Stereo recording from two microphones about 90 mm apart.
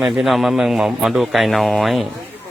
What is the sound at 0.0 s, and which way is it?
A man's voice, 5° right (ahead or behind).